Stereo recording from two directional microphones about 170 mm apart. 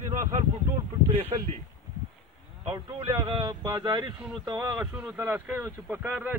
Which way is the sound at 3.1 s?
25° right (ahead or behind).